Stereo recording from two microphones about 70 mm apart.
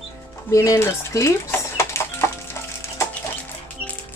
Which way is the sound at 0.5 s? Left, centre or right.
Left.